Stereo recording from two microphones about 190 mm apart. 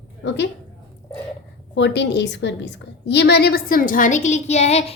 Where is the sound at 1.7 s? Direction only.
65° left (ahead or behind).